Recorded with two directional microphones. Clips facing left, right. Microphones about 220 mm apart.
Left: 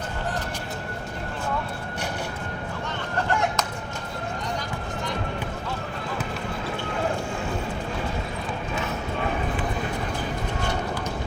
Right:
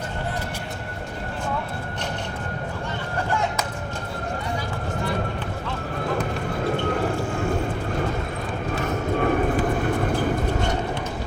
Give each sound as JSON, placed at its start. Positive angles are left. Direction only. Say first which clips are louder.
{"t": 8.7, "sound": "horse", "louder": "right 7 dB", "side_deg": -50}